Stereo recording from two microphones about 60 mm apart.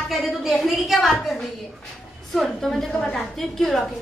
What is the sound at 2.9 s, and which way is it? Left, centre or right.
Speech, left.